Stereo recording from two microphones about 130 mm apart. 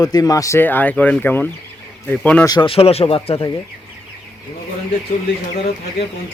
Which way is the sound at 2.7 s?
50° left (ahead or behind).